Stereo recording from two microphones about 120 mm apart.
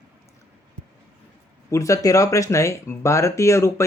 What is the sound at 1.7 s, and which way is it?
Speech, 25° left (ahead or behind).